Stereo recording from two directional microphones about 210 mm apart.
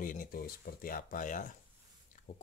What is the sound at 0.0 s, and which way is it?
Speech, 40° left (ahead or behind).